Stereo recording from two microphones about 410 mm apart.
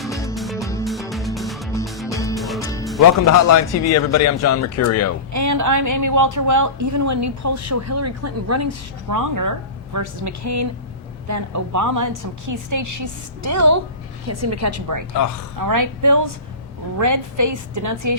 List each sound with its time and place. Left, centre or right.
0.0 s music: centre
3.0 s speech: left
5.3 s a woman's voice: right